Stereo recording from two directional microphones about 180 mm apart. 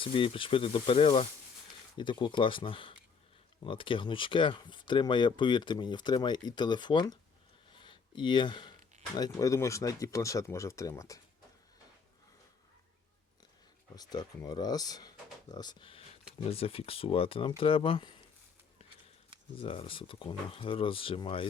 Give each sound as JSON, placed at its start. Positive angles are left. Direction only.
{"t": 0.0, "sound": "speech", "side_deg": 30}
{"t": 7.7, "sound": "a sound", "side_deg": 25}
{"t": 9.1, "sound": "speech", "side_deg": 20}
{"t": 13.9, "sound": "speech", "side_deg": 20}
{"t": 19.5, "sound": "speech", "side_deg": 30}